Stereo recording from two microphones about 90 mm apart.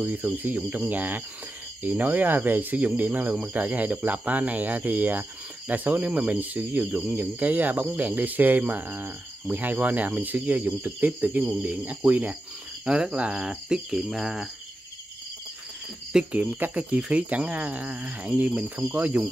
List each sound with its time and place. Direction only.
0.0 s speech: 20° right (ahead or behind)
16.1 s speech: 10° right (ahead or behind)